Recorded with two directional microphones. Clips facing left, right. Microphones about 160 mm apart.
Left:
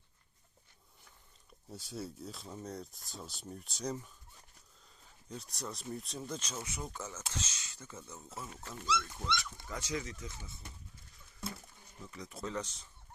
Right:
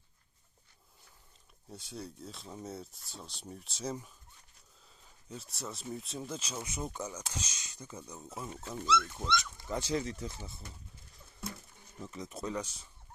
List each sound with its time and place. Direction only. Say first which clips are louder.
1.7 s speech: left 1 dB; centre (ahead or behind)
5.3 s speech: even; centre (ahead or behind); by 10.5 s 35° right (ahead or behind)
12.1 s speech: right 2 dB; 20° right (ahead or behind)